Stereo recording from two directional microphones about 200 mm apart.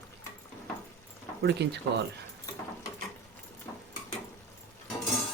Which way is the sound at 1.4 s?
55° right (ahead or behind).